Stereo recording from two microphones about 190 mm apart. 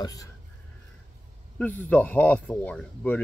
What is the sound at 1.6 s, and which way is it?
Speech, 10° left (ahead or behind).